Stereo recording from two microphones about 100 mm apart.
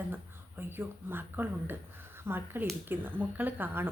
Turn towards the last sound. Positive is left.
turn(degrees=-20)  # may be behind; listen again after turning